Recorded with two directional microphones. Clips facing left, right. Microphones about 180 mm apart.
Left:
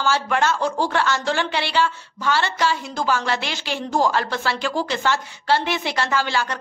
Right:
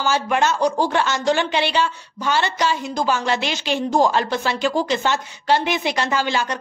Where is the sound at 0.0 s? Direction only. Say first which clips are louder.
Right 1 dB; 20° right (ahead or behind).